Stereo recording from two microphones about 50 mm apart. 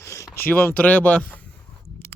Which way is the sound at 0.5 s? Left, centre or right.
Left.